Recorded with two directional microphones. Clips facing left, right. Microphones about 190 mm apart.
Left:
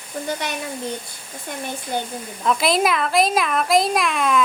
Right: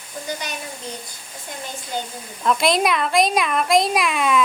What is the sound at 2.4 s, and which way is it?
Speech, centre (ahead or behind).